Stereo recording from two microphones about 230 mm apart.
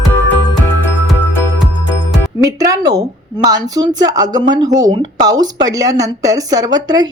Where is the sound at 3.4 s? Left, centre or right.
Centre.